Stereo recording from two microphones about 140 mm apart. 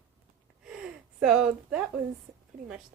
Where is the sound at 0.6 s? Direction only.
5° right (ahead or behind).